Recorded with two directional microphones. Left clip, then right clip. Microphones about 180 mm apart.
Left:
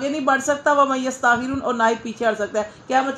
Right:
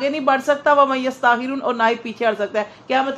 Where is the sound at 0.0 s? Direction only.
20° right (ahead or behind).